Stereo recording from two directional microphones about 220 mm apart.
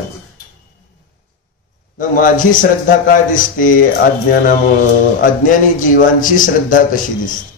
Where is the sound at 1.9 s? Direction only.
35° left (ahead or behind).